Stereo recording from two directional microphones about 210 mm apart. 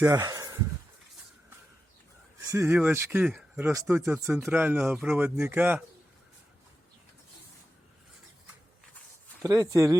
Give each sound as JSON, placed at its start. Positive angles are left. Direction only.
{"t": 0.0, "sound": "speech", "side_deg": -15}
{"t": 2.5, "sound": "speech", "side_deg": -10}
{"t": 9.4, "sound": "speech", "side_deg": -15}